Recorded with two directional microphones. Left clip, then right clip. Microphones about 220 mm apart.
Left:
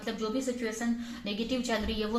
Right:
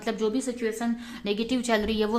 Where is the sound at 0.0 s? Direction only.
40° right (ahead or behind).